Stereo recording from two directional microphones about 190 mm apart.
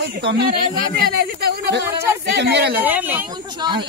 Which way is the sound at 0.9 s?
55° right (ahead or behind).